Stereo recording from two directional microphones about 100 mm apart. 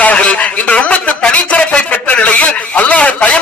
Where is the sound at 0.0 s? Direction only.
15° left (ahead or behind).